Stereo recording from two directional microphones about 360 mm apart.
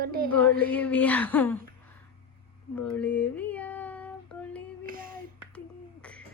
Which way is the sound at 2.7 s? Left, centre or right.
Centre.